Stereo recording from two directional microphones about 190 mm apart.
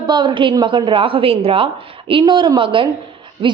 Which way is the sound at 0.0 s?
25° right (ahead or behind).